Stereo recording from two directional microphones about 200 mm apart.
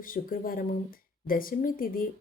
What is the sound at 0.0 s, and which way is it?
Speech, 45° left (ahead or behind).